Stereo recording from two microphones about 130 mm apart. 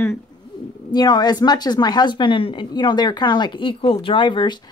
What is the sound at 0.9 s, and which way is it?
A woman's voice, 35° left (ahead or behind).